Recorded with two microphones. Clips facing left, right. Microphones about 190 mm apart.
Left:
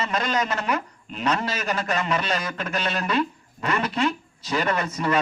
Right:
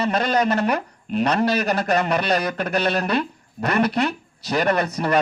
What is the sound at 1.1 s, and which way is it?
Speech, 65° right (ahead or behind).